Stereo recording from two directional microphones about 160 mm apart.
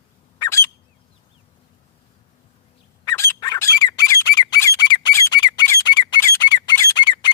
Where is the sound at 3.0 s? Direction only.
20° left (ahead or behind).